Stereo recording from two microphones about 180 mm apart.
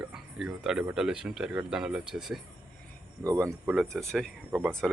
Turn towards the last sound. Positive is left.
turn(degrees=-5)  # may be behind; listen again after turning